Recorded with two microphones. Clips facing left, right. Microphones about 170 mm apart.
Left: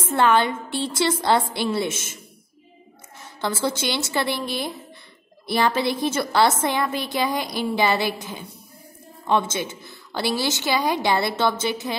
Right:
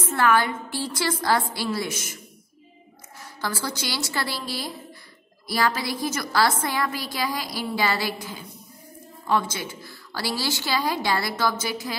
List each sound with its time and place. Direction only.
0.1 s a woman's voice: 25° left (ahead or behind)
3.2 s a woman's voice: 25° left (ahead or behind)